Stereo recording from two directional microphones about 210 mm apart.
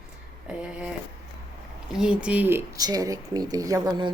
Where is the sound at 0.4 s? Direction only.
5° right (ahead or behind).